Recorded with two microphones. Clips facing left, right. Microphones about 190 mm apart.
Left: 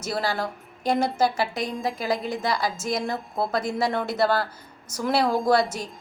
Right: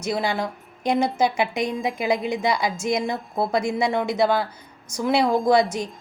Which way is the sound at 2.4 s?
20° right (ahead or behind).